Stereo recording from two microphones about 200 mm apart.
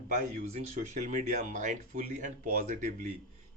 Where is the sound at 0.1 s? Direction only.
35° right (ahead or behind).